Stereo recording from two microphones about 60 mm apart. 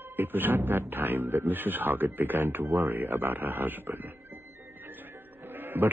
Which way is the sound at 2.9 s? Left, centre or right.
Right.